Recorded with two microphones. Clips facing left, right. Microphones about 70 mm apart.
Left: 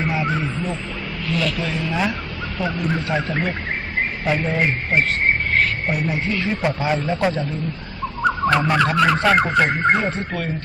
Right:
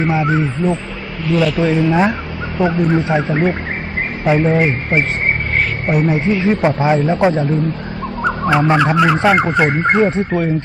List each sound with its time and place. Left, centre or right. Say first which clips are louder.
0.2 s speech: right 6 dB; right
1.3 s speech: right 9 dB; centre; by 7.4 s right
8.5 s speech: right 5 dB; right
8.8 s speech: right 4 dB; centre